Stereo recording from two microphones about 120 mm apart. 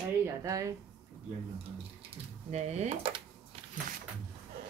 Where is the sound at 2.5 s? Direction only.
70° right (ahead or behind).